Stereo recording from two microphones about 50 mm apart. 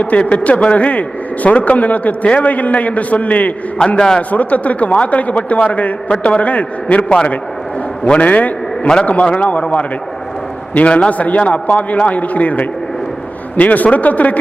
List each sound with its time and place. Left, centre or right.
0.0 s a man's voice: left
3.8 s a man's voice: centre
4.3 s a man's voice: left